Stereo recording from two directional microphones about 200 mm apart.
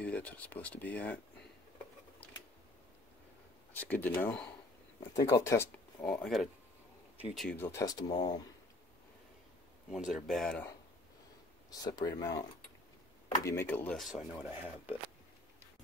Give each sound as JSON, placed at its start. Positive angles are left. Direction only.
{"t": 0.0, "sound": "speech", "side_deg": 5}
{"t": 3.8, "sound": "speech", "side_deg": 10}
{"t": 9.8, "sound": "speech", "side_deg": 0}
{"t": 11.8, "sound": "speech", "side_deg": 20}